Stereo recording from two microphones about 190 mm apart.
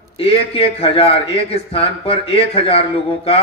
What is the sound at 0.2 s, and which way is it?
A man's voice, 30° left (ahead or behind).